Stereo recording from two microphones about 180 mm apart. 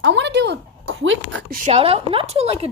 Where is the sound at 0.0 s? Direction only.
75° right (ahead or behind).